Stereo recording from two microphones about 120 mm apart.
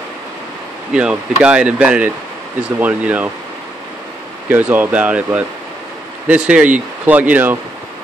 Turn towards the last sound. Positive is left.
turn(degrees=-15)  # may be behind; listen again after turning